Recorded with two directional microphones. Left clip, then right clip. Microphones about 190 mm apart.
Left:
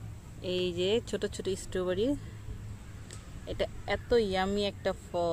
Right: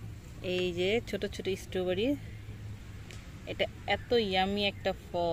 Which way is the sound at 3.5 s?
5° left (ahead or behind).